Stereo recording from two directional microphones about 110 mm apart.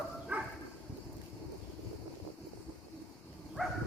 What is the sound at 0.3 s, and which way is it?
Bow-wow, 20° right (ahead or behind).